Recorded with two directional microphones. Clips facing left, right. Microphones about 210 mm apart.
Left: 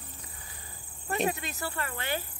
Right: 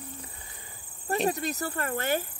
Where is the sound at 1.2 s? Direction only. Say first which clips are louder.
Right 4 dB; 40° right (ahead or behind).